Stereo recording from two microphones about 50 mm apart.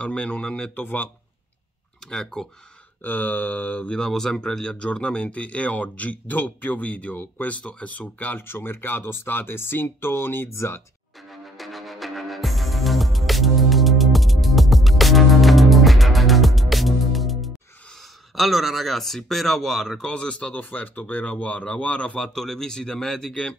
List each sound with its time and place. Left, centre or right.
0.0 s speech: left
0.7 s speech: left
2.0 s speech: centre
3.0 s speech: left
3.9 s speech: centre; by 8.5 s left
8.5 s speech: left
10.5 s speech: left
11.5 s music: centre
18.3 s speech: centre
20.0 s speech: centre
20.5 s speech: left
22.3 s speech: centre